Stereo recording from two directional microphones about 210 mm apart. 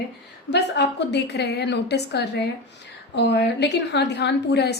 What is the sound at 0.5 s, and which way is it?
A woman's voice, 55° left (ahead or behind).